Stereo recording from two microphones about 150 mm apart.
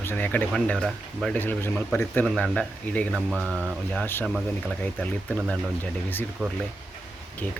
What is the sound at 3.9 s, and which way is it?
Speech, 10° left (ahead or behind).